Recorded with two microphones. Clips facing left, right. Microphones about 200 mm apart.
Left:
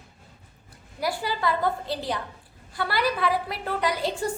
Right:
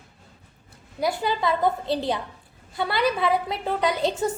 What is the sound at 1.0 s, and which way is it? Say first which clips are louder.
A woman's voice: right 3 dB; 20° right (ahead or behind).